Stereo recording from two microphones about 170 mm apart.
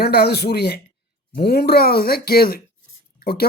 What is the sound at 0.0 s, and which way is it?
Speech, 70° left (ahead or behind).